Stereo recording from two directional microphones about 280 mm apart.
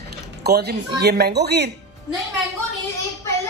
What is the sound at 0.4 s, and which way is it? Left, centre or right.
Speech, right.